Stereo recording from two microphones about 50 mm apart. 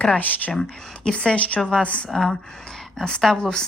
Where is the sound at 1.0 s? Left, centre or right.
Left.